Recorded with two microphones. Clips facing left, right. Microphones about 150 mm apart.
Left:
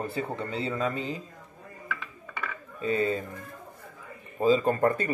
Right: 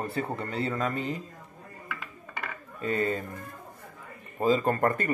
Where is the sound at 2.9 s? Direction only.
50° right (ahead or behind).